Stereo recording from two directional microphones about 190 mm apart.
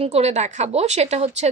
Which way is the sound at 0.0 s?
35° right (ahead or behind).